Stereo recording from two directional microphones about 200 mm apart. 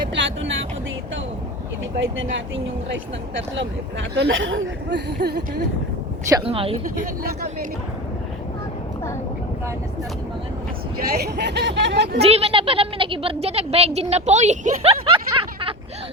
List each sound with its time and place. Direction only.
0.1 s vehicle: 65° right (ahead or behind)
3.3 s speech: 65° right (ahead or behind)
6.4 s speech: 30° right (ahead or behind)
10.9 s speech: 50° right (ahead or behind)
12.2 s speech: 30° right (ahead or behind)